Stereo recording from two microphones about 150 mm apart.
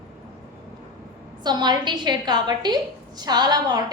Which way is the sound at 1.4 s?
30° right (ahead or behind).